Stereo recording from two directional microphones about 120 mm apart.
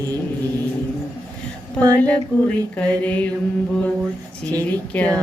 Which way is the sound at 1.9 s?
15° left (ahead or behind).